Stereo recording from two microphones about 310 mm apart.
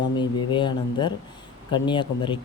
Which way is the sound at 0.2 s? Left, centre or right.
Centre.